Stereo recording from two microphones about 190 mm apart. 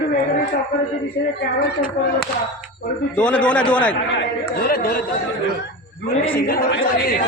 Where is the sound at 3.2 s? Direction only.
5° left (ahead or behind).